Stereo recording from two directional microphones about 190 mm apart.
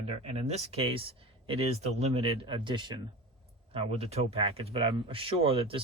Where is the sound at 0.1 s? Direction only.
35° right (ahead or behind).